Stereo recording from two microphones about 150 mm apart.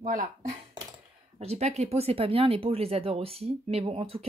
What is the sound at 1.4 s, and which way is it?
Speech, 45° right (ahead or behind).